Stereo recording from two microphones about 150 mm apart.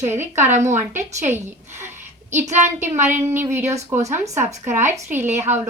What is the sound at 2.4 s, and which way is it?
A woman's voice, 15° right (ahead or behind).